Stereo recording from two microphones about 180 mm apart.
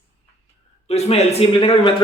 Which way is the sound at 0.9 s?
35° left (ahead or behind).